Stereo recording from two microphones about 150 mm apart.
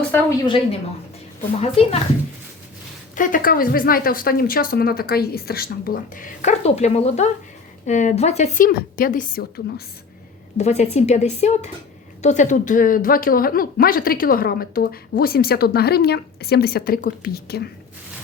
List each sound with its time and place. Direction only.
0.4 s a woman's voice: 35° left (ahead or behind)
3.2 s a woman's voice: 65° left (ahead or behind)
6.6 s a woman's voice: 45° left (ahead or behind); by 9.8 s 90° left
10.6 s a woman's voice: 45° left (ahead or behind); by 17.7 s 90° left